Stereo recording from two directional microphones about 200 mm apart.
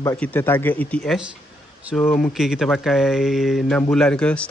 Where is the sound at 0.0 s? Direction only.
10° left (ahead or behind).